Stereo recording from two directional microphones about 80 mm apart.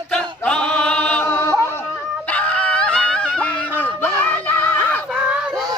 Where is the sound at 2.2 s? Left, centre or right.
Centre.